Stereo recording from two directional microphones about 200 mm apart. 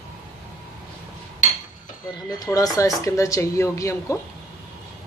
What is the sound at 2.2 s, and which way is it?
Speech, 20° left (ahead or behind).